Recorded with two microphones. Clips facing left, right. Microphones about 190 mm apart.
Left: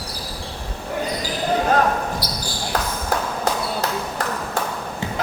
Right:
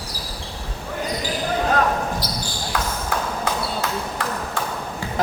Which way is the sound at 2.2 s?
10° left (ahead or behind).